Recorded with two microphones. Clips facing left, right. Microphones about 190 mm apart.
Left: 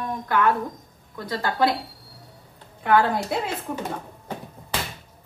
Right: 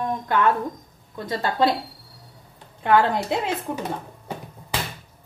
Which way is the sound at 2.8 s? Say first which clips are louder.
Right 1 dB; 25° right (ahead or behind).